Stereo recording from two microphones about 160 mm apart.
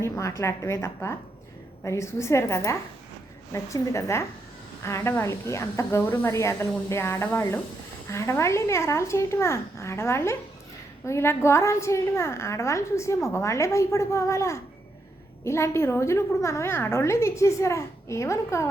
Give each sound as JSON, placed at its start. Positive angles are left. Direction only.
{"t": 0.0, "sound": "a woman's voice", "side_deg": 20}